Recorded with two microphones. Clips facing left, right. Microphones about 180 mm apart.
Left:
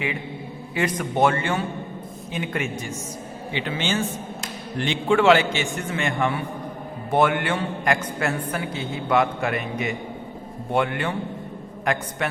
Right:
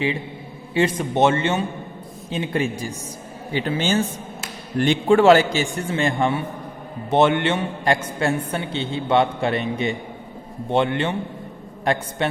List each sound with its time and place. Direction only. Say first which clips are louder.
0.7 s a man's voice: right 4 dB; 30° right (ahead or behind)